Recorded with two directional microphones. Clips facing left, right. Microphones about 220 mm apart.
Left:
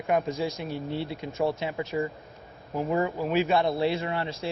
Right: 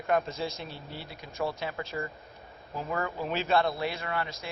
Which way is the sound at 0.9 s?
25° left (ahead or behind).